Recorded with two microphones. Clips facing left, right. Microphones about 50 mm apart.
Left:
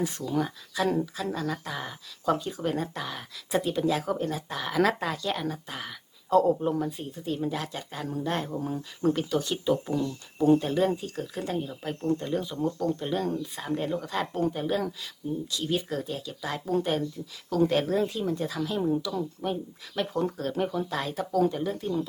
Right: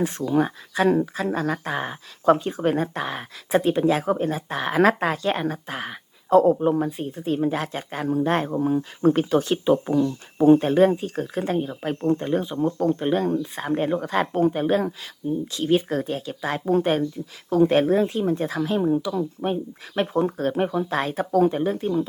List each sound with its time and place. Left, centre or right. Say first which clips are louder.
0.0 s speech: right 7 dB; right
14.8 s speech: right 6 dB; right
15.6 s speech: right 9 dB; right
18.8 s speech: right 4 dB; right